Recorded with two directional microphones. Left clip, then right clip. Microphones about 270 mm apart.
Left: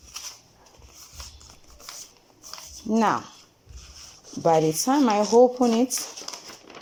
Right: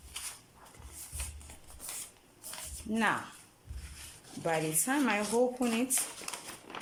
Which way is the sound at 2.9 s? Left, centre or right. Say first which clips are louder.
Left 8 dB; centre.